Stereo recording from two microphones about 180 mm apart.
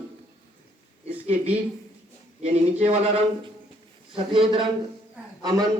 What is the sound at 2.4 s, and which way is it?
A man's voice, 35° right (ahead or behind).